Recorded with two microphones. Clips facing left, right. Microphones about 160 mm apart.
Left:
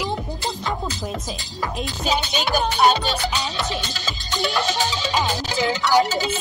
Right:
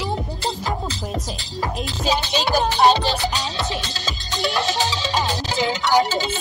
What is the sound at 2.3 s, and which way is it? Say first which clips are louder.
Music: right 2 dB; 30° right (ahead or behind).